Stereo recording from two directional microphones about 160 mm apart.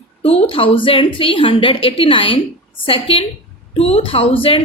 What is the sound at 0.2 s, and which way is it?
A woman's voice, 35° left (ahead or behind).